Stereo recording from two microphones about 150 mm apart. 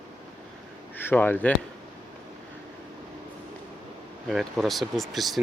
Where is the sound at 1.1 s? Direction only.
10° left (ahead or behind).